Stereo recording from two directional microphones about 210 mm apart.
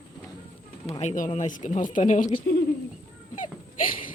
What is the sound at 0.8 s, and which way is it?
Speech, 30° left (ahead or behind).